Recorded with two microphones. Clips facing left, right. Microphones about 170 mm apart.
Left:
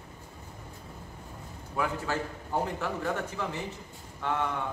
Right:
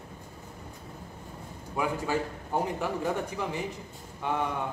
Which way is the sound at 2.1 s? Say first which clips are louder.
Right 2 dB; 15° right (ahead or behind).